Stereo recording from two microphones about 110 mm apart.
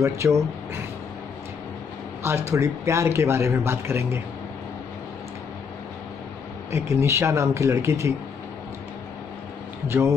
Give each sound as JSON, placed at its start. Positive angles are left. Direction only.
{"t": 0.0, "sound": "speech", "side_deg": -25}
{"t": 2.2, "sound": "speech", "side_deg": -25}
{"t": 6.7, "sound": "speech", "side_deg": -25}
{"t": 9.8, "sound": "speech", "side_deg": -25}